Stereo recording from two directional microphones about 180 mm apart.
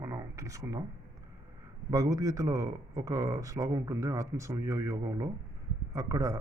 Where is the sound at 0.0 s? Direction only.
15° right (ahead or behind).